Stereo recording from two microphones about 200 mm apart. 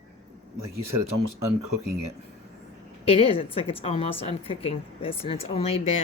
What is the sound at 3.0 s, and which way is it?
A woman's voice, 30° left (ahead or behind).